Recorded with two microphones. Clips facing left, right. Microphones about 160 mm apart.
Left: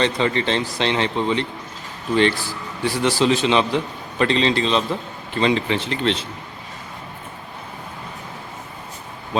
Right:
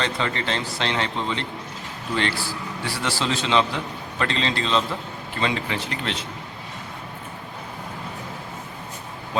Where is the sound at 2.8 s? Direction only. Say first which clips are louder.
Left 9 dB; 15° left (ahead or behind).